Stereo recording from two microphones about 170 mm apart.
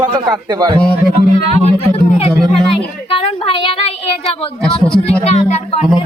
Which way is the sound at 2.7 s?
30° left (ahead or behind).